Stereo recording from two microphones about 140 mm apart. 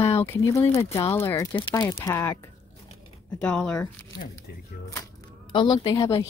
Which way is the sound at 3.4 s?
5° left (ahead or behind).